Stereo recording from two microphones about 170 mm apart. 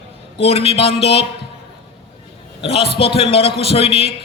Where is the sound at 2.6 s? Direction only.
35° left (ahead or behind).